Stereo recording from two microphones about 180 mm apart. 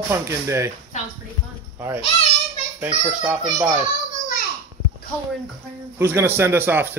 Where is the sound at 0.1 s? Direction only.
15° right (ahead or behind).